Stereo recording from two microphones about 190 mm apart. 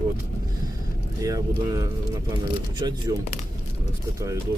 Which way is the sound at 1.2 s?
15° right (ahead or behind).